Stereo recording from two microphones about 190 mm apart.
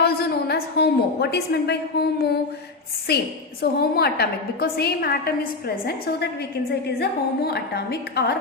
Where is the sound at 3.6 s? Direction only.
55° left (ahead or behind).